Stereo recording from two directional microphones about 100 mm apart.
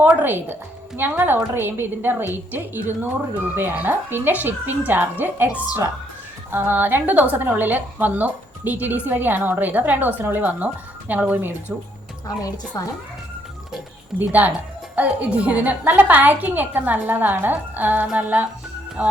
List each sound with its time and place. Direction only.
0.0 s a woman's voice: 20° right (ahead or behind)
12.4 s a woman's voice: 35° left (ahead or behind)
14.2 s a woman's voice: 15° right (ahead or behind)